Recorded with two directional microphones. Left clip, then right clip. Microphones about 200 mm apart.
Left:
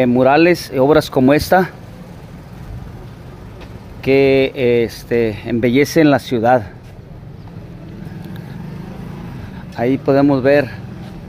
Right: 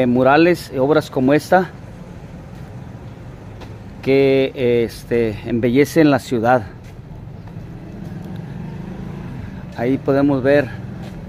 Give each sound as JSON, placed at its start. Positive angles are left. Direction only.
{"t": 0.0, "sound": "speech", "side_deg": 10}
{"t": 4.0, "sound": "speech", "side_deg": 10}
{"t": 9.8, "sound": "speech", "side_deg": 20}